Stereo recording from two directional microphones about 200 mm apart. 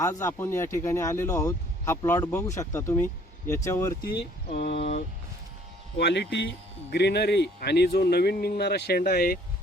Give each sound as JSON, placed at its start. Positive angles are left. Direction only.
{"t": 0.0, "sound": "speech", "side_deg": 15}
{"t": 4.2, "sound": "speech", "side_deg": 50}
{"t": 6.0, "sound": "speech", "side_deg": 55}